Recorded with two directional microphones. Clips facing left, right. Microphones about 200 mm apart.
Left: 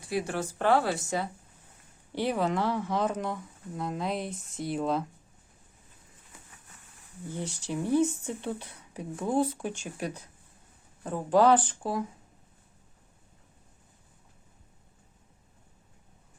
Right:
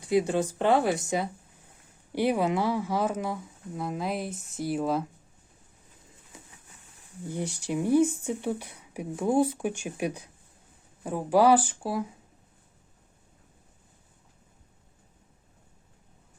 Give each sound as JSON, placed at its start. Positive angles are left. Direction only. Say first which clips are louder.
{"t": 0.1, "sound": "speech", "louder": "right 7 dB", "side_deg": -20}
{"t": 7.3, "sound": "speech", "louder": "right 3 dB", "side_deg": -15}